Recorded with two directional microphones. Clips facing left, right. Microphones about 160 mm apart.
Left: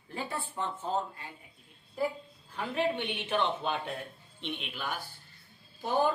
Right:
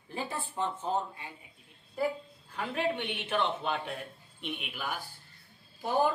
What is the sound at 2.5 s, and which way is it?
A woman's voice, centre (ahead or behind).